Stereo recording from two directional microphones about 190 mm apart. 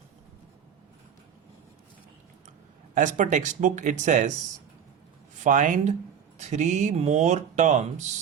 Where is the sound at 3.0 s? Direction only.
40° right (ahead or behind).